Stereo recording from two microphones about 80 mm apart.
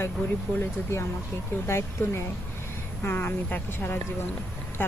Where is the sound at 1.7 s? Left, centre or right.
Left.